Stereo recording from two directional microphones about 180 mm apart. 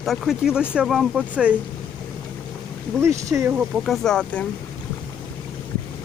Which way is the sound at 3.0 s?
15° right (ahead or behind).